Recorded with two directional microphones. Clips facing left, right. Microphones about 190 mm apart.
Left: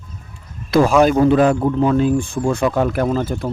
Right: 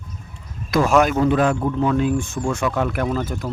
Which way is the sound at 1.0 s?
30° left (ahead or behind).